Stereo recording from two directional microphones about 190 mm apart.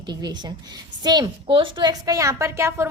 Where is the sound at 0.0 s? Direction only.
20° right (ahead or behind).